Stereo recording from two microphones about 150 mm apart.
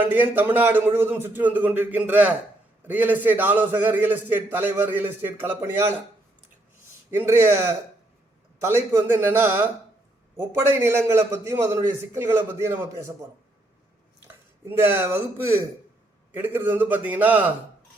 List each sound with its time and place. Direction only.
0.0 s a man's voice: 15° right (ahead or behind)
7.1 s a man's voice: 15° right (ahead or behind)
14.3 s a sound: 15° right (ahead or behind)
16.3 s a man's voice: 15° right (ahead or behind)